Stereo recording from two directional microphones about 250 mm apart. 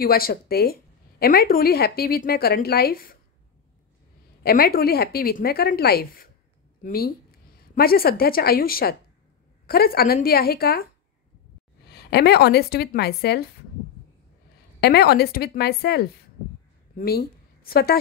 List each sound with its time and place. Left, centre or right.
0.0 s a woman's voice: left
4.4 s a woman's voice: left
11.9 s a woman's voice: left
14.8 s a woman's voice: left